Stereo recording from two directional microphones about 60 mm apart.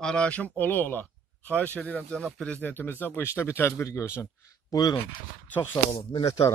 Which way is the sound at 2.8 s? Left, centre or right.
Left.